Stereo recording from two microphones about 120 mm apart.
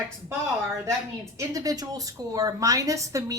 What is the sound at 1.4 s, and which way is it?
A woman's voice, 30° right (ahead or behind).